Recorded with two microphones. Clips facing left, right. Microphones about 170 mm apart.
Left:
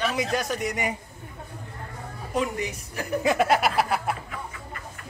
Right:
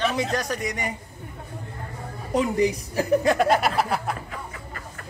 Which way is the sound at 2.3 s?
35° right (ahead or behind).